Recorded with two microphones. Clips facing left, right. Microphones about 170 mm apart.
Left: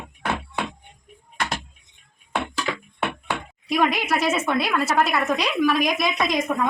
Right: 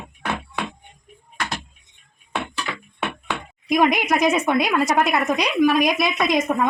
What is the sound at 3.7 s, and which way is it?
A woman's voice, 15° right (ahead or behind).